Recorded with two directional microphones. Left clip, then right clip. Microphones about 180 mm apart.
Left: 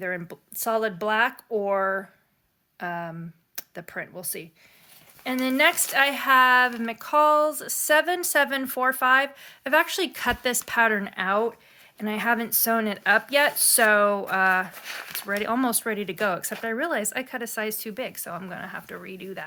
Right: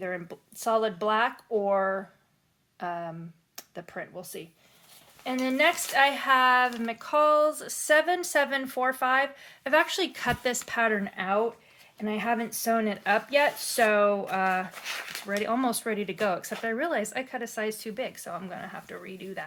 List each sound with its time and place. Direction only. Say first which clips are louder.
0.0 s speech: left 3 dB; 40° left (ahead or behind)
14.8 s speech: right 1 dB; 15° left (ahead or behind)
15.3 s speech: left 2 dB; 40° left (ahead or behind)